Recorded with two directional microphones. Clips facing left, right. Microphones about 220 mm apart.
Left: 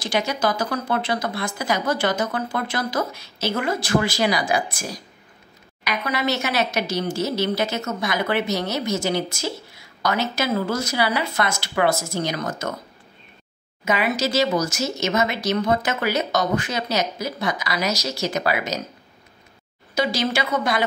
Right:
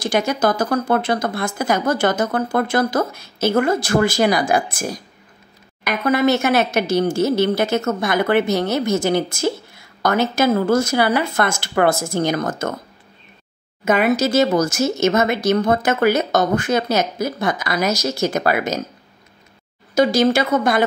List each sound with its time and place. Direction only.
0.0 s speech: 50° right (ahead or behind)
13.8 s speech: 50° right (ahead or behind)
20.0 s speech: 45° right (ahead or behind)